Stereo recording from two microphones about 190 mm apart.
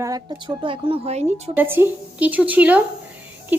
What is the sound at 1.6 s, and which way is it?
Speech, 10° right (ahead or behind).